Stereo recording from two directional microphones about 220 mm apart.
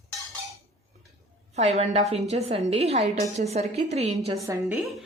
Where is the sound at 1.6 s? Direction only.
30° right (ahead or behind).